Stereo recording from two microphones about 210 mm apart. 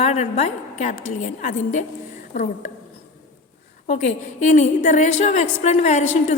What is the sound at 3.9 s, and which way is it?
A woman's voice, 35° left (ahead or behind).